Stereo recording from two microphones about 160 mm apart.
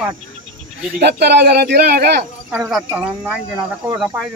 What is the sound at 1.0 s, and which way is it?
Speech, 90° right.